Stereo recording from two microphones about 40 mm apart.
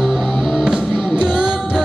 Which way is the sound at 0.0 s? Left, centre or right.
Centre.